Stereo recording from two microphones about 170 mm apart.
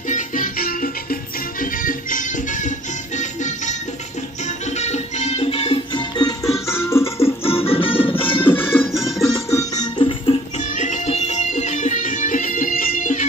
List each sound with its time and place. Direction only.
0.1 s music: 50° left (ahead or behind); by 7.3 s 15° left (ahead or behind)
7.4 s music: 35° left (ahead or behind)
8.5 s music: 15° left (ahead or behind)
8.8 s music: centre (ahead or behind)
9.5 s music: 20° left (ahead or behind)
10.6 s music: 45° left (ahead or behind)